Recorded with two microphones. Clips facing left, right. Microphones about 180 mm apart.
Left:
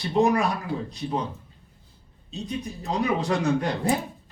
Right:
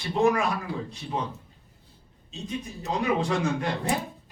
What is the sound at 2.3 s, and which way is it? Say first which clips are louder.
A man's voice: left 2 dB; 35° left (ahead or behind).